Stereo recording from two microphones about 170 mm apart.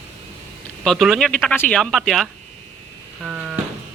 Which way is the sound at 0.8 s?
Centre (ahead or behind).